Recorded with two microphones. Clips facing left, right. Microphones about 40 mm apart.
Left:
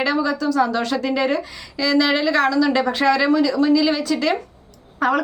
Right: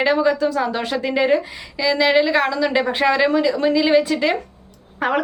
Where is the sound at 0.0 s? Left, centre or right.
Right.